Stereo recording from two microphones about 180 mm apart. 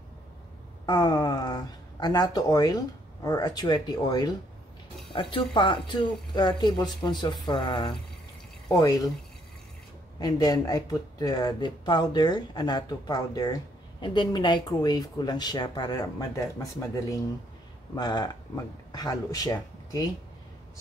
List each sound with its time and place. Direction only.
0.8 s speech: 20° left (ahead or behind)
10.1 s speech: 20° left (ahead or behind)